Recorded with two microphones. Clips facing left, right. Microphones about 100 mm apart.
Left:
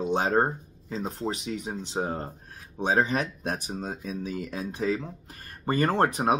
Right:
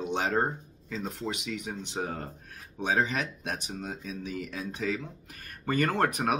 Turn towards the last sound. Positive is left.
turn(degrees=30)  # may be behind; listen again after turning